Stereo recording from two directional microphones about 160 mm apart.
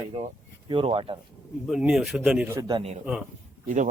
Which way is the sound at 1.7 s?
5° right (ahead or behind).